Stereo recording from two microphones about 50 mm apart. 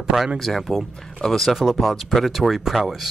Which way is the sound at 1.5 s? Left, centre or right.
Centre.